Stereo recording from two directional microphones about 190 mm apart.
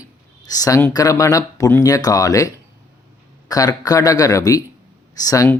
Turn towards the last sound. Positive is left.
turn(degrees=15)  # may be behind; listen again after turning